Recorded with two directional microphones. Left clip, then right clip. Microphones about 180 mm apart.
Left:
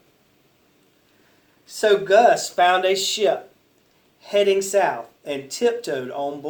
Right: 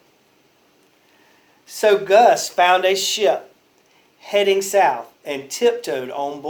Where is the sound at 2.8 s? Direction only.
30° right (ahead or behind).